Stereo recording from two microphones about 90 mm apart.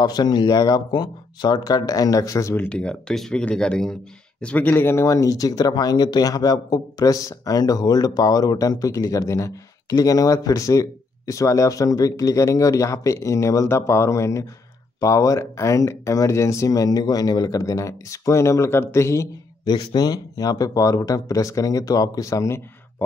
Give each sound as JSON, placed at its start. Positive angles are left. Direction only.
{"t": 0.0, "sound": "speech", "side_deg": 50}
{"t": 2.5, "sound": "speech", "side_deg": 20}
{"t": 2.8, "sound": "speech", "side_deg": 10}
{"t": 19.6, "sound": "speech", "side_deg": 50}